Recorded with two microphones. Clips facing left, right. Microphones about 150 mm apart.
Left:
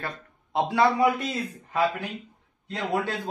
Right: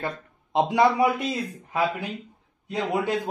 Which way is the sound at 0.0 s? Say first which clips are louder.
Right 4 dB; 20° right (ahead or behind).